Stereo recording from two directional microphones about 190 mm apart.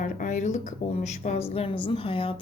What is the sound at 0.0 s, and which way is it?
Speech, 40° left (ahead or behind).